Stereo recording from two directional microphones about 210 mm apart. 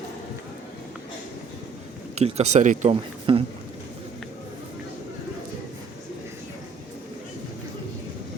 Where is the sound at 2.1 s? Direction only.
30° right (ahead or behind).